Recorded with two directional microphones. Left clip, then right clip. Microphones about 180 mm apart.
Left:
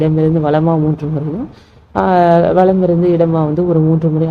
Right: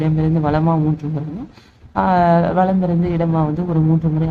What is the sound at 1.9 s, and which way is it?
Speech, 15° left (ahead or behind).